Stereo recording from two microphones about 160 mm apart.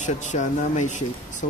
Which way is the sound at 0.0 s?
50° left (ahead or behind).